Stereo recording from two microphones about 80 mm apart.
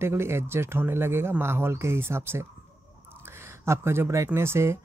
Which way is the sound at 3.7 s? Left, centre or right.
Right.